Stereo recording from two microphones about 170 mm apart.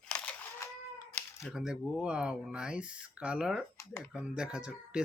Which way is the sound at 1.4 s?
5° right (ahead or behind).